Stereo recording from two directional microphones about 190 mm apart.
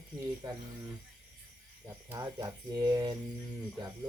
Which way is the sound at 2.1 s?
20° right (ahead or behind).